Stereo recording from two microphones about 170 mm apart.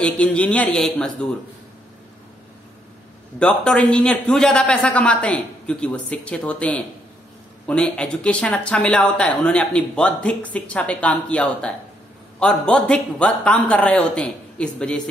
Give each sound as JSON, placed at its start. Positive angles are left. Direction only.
{"t": 0.0, "sound": "speech", "side_deg": 5}
{"t": 3.3, "sound": "a man's voice", "side_deg": 5}